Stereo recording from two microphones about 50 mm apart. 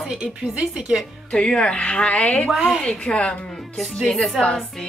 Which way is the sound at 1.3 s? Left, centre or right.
Centre.